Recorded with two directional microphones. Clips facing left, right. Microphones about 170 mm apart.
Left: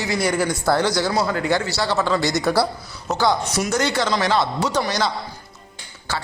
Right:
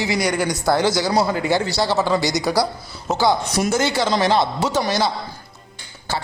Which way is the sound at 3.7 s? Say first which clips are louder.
Right 2 dB; 10° right (ahead or behind).